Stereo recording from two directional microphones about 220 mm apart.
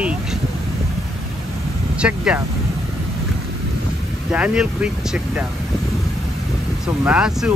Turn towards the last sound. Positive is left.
turn(degrees=-5)  # may be behind; listen again after turning